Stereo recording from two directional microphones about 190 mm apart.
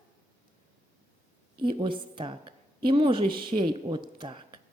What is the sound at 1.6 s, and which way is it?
A woman's voice, 25° right (ahead or behind).